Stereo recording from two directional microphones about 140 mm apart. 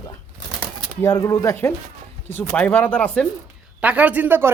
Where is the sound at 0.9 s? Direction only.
20° left (ahead or behind).